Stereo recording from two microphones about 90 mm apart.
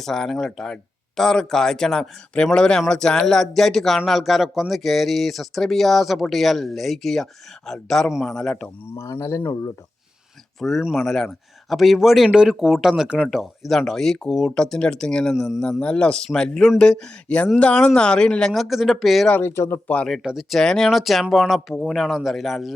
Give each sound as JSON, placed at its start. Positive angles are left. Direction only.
{"t": 0.0, "sound": "speech", "side_deg": 5}
{"t": 9.0, "sound": "speech", "side_deg": 35}
{"t": 10.6, "sound": "speech", "side_deg": 5}
{"t": 15.8, "sound": "speech", "side_deg": 10}
{"t": 19.3, "sound": "speech", "side_deg": 25}
{"t": 20.1, "sound": "speech", "side_deg": 0}